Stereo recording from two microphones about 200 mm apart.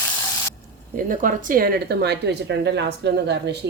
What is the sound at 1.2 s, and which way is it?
Speech, 45° right (ahead or behind).